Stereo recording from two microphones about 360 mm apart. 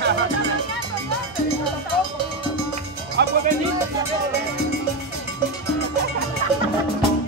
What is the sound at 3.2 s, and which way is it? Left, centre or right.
Music, right.